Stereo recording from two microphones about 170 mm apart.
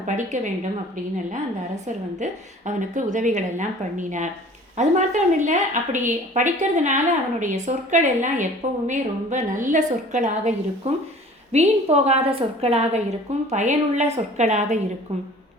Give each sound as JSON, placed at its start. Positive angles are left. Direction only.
{"t": 0.0, "sound": "a woman's voice", "side_deg": -45}
{"t": 2.1, "sound": "a woman's voice", "side_deg": -45}